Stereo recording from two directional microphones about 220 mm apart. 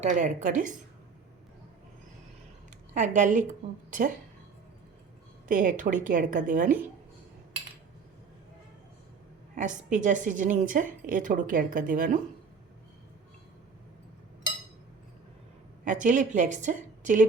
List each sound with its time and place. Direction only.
0.0 s a woman's voice: 35° right (ahead or behind)
2.9 s a woman's voice: 35° right (ahead or behind)
5.5 s a woman's voice: 35° right (ahead or behind)
9.6 s a woman's voice: 35° right (ahead or behind)
15.8 s a woman's voice: 35° right (ahead or behind)